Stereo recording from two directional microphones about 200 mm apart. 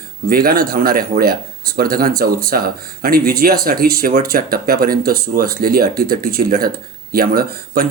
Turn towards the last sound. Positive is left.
turn(degrees=-45)  # may be behind; listen again after turning